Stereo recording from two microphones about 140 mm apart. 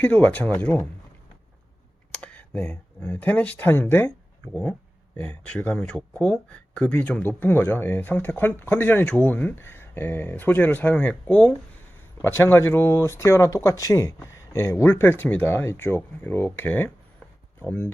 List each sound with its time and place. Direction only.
0.0 s speech: 10° left (ahead or behind)
2.1 s speech: 10° left (ahead or behind)
5.2 s speech: 10° left (ahead or behind)